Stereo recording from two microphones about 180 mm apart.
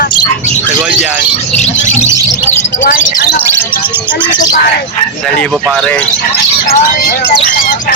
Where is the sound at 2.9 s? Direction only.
65° left (ahead or behind).